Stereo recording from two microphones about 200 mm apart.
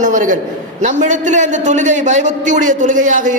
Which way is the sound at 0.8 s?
40° right (ahead or behind).